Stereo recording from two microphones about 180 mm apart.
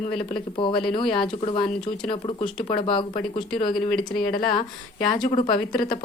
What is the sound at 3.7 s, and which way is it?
Speech, centre (ahead or behind).